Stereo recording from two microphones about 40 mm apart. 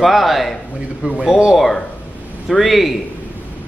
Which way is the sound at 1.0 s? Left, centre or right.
Right.